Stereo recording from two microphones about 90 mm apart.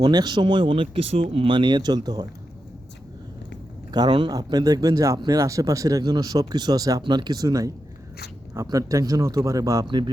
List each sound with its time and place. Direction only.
0.0 s speech: 55° right (ahead or behind)
3.9 s speech: 50° right (ahead or behind)
7.0 s speech: 55° right (ahead or behind)
9.8 s speech: 60° right (ahead or behind)